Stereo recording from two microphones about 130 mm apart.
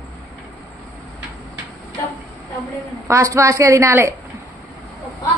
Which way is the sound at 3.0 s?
20° right (ahead or behind).